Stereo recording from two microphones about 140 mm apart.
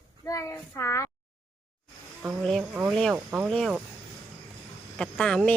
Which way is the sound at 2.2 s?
Centre (ahead or behind).